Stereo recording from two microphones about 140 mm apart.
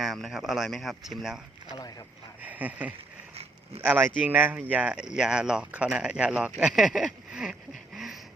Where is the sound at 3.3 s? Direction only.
45° right (ahead or behind).